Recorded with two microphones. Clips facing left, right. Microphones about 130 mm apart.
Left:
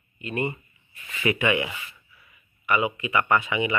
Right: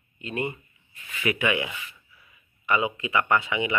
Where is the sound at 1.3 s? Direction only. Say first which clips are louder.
Left 2 dB; 10° right (ahead or behind).